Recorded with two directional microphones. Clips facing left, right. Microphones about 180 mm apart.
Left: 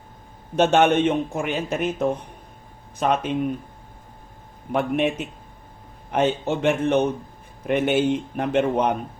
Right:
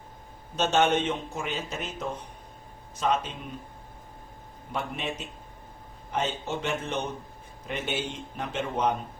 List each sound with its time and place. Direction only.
0.5 s a man's voice: 60° left (ahead or behind)
4.7 s a man's voice: 60° left (ahead or behind)